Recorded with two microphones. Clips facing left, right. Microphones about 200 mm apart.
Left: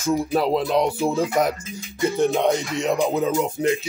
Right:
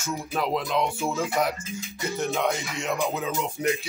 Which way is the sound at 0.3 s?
40° left (ahead or behind).